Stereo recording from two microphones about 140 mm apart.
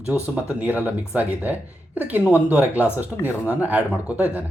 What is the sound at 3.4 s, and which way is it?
Speech, 10° right (ahead or behind).